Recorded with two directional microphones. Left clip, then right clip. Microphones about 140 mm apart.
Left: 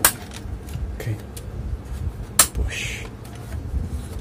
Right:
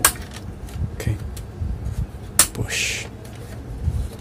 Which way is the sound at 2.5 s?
35° right (ahead or behind).